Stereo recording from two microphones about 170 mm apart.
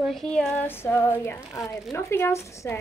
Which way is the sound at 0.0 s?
Centre (ahead or behind).